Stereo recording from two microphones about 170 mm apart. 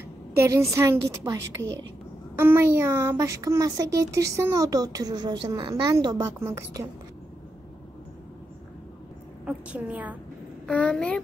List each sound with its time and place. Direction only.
0.4 s speech: 15° right (ahead or behind)
9.5 s a woman's voice: 5° right (ahead or behind)
10.7 s a child's voice: 5° left (ahead or behind)